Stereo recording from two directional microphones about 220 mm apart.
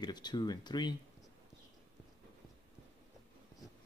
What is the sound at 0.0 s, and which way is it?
Speech, 20° left (ahead or behind).